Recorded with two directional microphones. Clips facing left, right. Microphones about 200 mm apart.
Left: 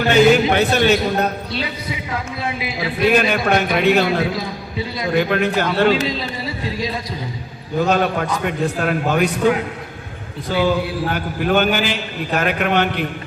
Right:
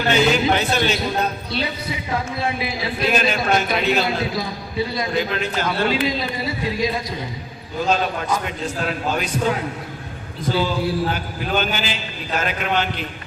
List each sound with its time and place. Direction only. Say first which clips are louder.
0.1 s a man's voice: left 5 dB; 55° left (ahead or behind)
3.1 s a man's voice: left 3 dB; 60° left (ahead or behind)
6.7 s speech: right 2 dB; 30° left (ahead or behind)
7.8 s a man's voice: left 4 dB; 60° left (ahead or behind)
10.5 s a man's voice: left 3 dB; 60° left (ahead or behind)